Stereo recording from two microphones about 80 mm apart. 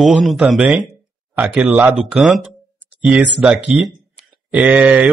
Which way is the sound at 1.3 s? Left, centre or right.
Right.